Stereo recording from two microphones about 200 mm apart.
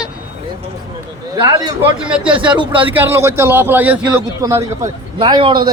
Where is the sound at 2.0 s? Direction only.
5° right (ahead or behind).